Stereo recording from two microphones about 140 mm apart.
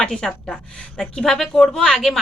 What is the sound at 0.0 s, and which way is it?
A woman's voice, 5° left (ahead or behind).